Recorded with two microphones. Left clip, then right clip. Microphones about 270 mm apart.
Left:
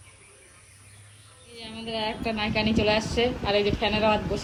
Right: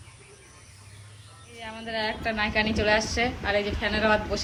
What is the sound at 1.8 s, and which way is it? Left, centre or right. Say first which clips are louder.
A woman's voice: right 1 dB; centre.